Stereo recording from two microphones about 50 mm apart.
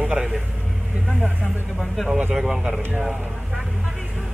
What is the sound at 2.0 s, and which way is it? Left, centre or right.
Speech, right.